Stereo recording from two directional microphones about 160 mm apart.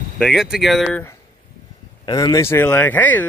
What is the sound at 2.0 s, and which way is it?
Speech, 25° left (ahead or behind).